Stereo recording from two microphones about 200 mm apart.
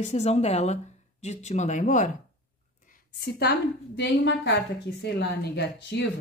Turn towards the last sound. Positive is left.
turn(degrees=60)  # may be behind; listen again after turning